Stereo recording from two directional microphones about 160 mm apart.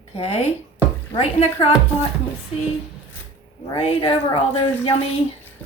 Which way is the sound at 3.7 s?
35° left (ahead or behind).